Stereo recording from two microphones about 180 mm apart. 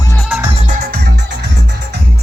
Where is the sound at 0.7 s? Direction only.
55° right (ahead or behind).